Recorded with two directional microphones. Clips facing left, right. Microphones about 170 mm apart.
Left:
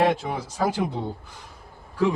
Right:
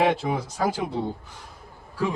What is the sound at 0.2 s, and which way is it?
Speech, 5° right (ahead or behind).